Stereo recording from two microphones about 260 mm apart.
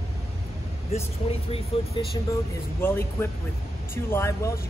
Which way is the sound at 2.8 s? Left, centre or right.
Centre.